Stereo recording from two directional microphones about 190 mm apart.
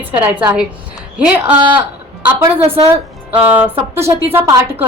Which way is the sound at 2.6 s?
30° right (ahead or behind).